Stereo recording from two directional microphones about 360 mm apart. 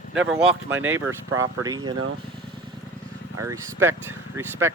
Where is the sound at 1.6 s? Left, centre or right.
Centre.